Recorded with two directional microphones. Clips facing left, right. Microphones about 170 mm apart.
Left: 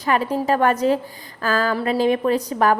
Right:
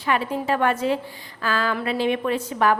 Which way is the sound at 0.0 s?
40° left (ahead or behind).